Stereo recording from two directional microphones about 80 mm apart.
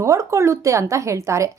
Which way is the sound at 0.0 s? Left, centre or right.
Right.